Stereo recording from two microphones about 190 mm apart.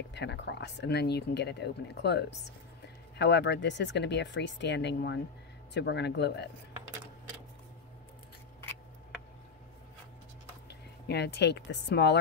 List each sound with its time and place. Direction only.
0.1 s speech: 65° left (ahead or behind)
10.7 s speech: 60° left (ahead or behind)